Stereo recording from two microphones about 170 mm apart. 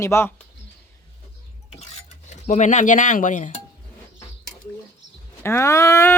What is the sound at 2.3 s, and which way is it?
Speech, 45° left (ahead or behind).